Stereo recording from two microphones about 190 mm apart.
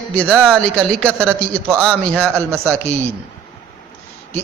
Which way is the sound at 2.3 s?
15° right (ahead or behind).